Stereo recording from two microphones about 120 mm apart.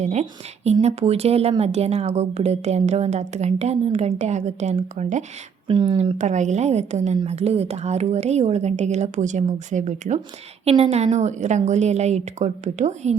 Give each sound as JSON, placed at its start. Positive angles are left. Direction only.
{"t": 0.0, "sound": "a woman's voice", "side_deg": -70}
{"t": 5.6, "sound": "speech", "side_deg": -40}
{"t": 6.1, "sound": "speech", "side_deg": -80}
{"t": 10.7, "sound": "speech", "side_deg": -60}